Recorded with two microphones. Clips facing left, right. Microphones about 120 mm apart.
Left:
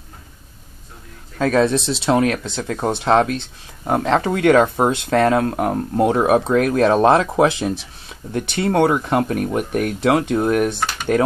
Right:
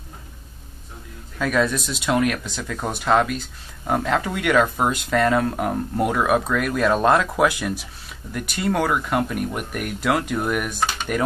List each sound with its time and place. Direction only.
1.4 s speech: 30° left (ahead or behind)